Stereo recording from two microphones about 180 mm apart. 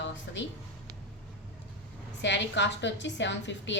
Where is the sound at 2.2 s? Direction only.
75° left (ahead or behind).